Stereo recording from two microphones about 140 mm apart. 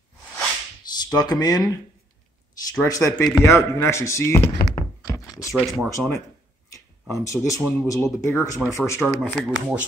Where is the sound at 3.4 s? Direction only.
20° left (ahead or behind).